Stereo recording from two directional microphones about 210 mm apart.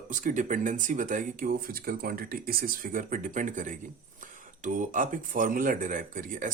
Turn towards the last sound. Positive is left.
turn(degrees=-40)  # may be behind; listen again after turning